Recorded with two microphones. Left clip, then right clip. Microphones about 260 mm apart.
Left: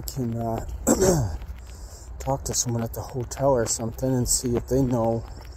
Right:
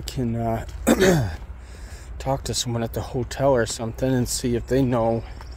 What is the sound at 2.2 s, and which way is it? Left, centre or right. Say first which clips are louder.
Speech: right 2 dB; right.